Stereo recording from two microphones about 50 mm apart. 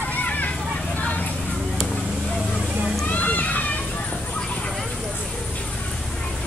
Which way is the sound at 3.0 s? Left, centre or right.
Left.